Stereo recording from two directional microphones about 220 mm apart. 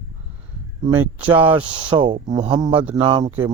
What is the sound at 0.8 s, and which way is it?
Speech, 10° right (ahead or behind).